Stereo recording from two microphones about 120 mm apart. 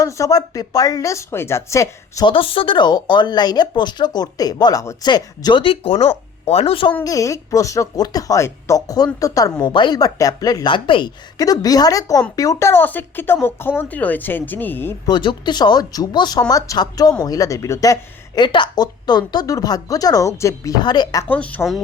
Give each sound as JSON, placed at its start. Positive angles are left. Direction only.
{"t": 0.0, "sound": "speech", "side_deg": 30}
{"t": 2.2, "sound": "speech", "side_deg": 50}
{"t": 7.0, "sound": "speech", "side_deg": 30}
{"t": 11.3, "sound": "speech", "side_deg": 30}
{"t": 15.0, "sound": "speech", "side_deg": 40}
{"t": 20.8, "sound": "speech", "side_deg": 35}
{"t": 21.2, "sound": "speech", "side_deg": 10}